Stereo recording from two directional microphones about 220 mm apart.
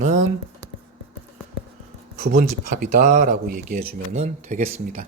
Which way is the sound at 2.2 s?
40° right (ahead or behind).